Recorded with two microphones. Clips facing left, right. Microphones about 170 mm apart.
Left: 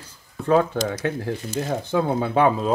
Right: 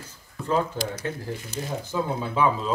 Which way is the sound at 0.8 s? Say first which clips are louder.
Left 6 dB; 65° left (ahead or behind).